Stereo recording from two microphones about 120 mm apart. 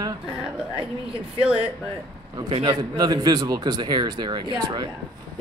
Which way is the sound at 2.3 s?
40° right (ahead or behind).